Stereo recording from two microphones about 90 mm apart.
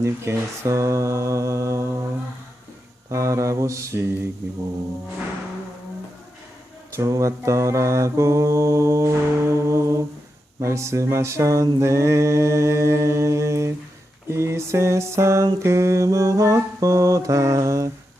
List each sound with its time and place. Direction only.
0.0 s mantra: 30° right (ahead or behind)
3.1 s mantra: 35° right (ahead or behind)
6.9 s mantra: 35° right (ahead or behind)